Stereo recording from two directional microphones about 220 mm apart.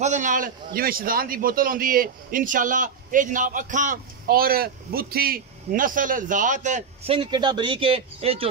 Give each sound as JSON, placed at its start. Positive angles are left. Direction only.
{"t": 0.0, "sound": "a man's voice", "side_deg": -35}